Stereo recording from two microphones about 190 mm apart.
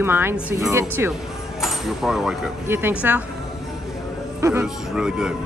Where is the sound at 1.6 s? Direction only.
Centre (ahead or behind).